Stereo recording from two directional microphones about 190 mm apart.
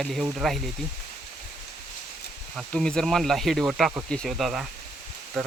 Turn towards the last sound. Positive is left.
turn(degrees=0)  # may be behind; listen again after turning